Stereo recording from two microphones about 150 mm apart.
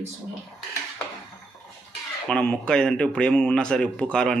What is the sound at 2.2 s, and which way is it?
Speech, 5° left (ahead or behind).